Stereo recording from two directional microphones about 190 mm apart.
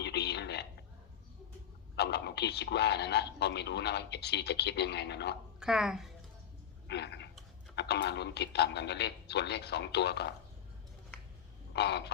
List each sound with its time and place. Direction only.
0.0 s a sound: 60° left (ahead or behind)
2.0 s a man's voice: 60° left (ahead or behind)
5.5 s speech: 5° right (ahead or behind)
6.8 s a man's voice: 65° left (ahead or behind)
11.7 s crow: 60° left (ahead or behind)